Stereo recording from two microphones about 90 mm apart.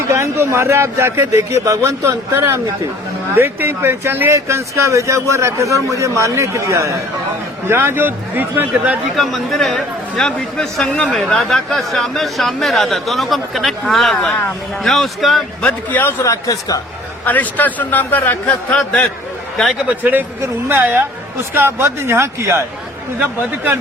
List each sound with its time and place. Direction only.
0.1 s speech: 30° right (ahead or behind)
9.1 s speech: centre (ahead or behind)
15.6 s a man's voice: 20° left (ahead or behind)
16.2 s speech: 35° left (ahead or behind)
17.2 s a man's voice: 20° left (ahead or behind)
20.0 s speech: 20° right (ahead or behind)